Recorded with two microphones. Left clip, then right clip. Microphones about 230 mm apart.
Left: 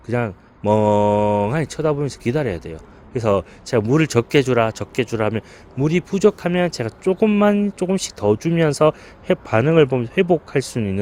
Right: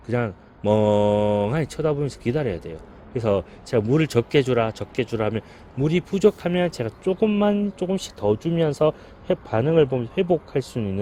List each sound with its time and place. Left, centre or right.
0.1 s speech: centre